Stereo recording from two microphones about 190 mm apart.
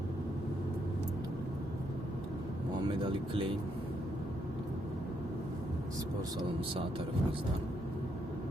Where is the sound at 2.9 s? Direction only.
25° right (ahead or behind).